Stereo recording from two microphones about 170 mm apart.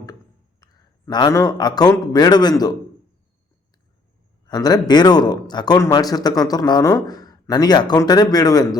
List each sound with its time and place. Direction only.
0.6 s a man's voice: 25° left (ahead or behind)
4.4 s a man's voice: 25° left (ahead or behind)